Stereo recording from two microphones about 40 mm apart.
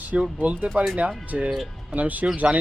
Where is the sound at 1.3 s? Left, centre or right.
Centre.